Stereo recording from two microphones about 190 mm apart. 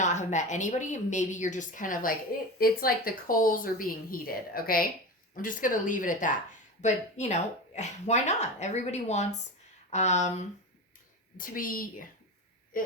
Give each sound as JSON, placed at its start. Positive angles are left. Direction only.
{"t": 0.0, "sound": "speech", "side_deg": 40}